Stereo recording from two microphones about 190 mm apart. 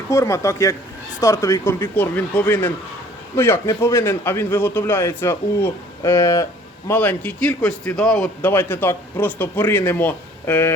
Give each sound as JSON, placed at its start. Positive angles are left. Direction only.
{"t": 0.1, "sound": "a man's voice", "side_deg": 15}